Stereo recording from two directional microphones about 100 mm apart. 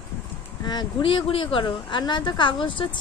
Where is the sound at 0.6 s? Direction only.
50° left (ahead or behind).